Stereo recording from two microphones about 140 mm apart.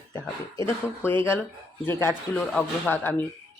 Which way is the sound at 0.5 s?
15° left (ahead or behind).